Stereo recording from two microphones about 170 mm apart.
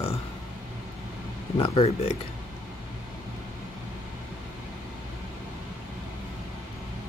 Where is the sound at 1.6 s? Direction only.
35° left (ahead or behind).